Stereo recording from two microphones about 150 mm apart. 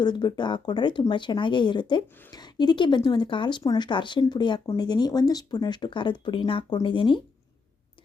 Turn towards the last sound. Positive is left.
turn(degrees=35)  # may be behind; listen again after turning